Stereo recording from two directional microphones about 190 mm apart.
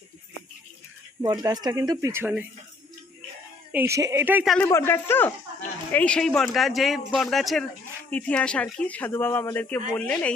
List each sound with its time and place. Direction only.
1.2 s speech: 20° right (ahead or behind)
3.7 s speech: 10° right (ahead or behind)
4.5 s speech: 10° left (ahead or behind)